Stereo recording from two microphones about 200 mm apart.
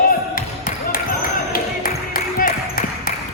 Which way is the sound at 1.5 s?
45° left (ahead or behind).